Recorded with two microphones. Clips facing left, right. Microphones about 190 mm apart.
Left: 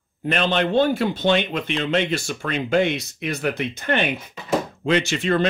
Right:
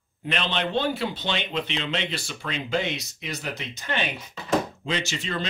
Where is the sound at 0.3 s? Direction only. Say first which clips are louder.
Left 6 dB; 50° left (ahead or behind).